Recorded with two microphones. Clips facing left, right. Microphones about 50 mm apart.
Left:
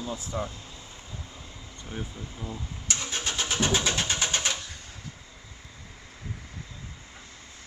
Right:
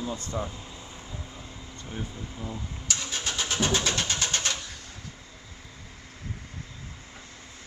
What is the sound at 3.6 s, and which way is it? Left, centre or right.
Pigeon, centre.